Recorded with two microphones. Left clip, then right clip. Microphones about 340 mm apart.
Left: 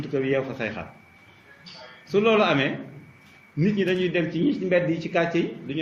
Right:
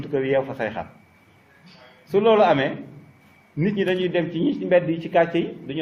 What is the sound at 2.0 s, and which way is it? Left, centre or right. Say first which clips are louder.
A man's voice: right 4 dB; right.